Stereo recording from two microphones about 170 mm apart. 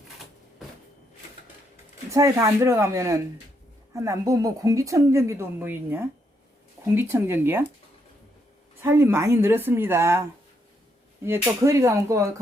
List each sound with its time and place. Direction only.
1.7 s a woman's voice: 20° right (ahead or behind)
8.8 s a woman's voice: 15° right (ahead or behind)
11.6 s a woman's voice: 15° right (ahead or behind)